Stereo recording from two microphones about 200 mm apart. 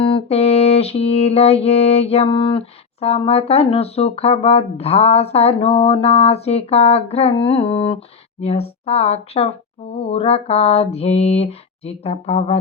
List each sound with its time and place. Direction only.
0.0 s music: 30° left (ahead or behind)